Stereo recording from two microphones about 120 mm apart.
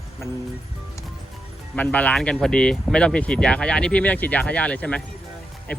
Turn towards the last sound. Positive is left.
turn(degrees=15)  # may be behind; listen again after turning